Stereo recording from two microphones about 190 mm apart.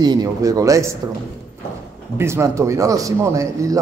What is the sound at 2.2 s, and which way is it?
Speech, 15° right (ahead or behind).